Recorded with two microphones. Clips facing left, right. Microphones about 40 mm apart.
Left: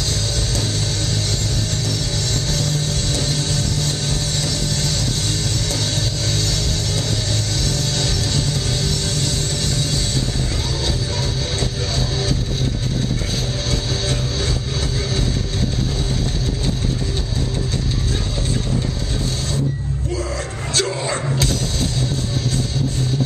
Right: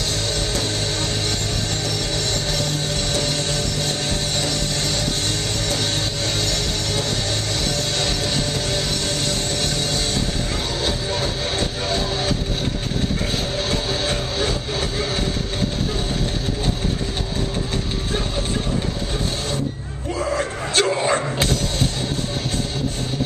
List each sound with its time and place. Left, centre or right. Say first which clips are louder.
2.5 s music: left 1 dB; right
7.6 s music: even; right
11.9 s music: right 2 dB; right
13.7 s music: even; right
20.2 s a sound: right 3 dB; right